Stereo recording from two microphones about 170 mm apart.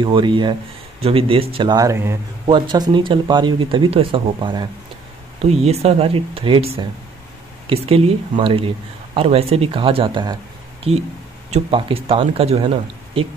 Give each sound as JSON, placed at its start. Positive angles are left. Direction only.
{"t": 0.0, "sound": "speech", "side_deg": -30}
{"t": 2.4, "sound": "speech", "side_deg": -30}
{"t": 5.4, "sound": "speech", "side_deg": -40}